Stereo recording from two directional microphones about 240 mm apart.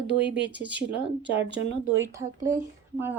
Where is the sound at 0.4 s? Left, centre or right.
Centre.